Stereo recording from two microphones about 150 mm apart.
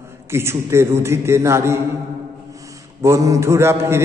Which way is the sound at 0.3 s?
15° right (ahead or behind).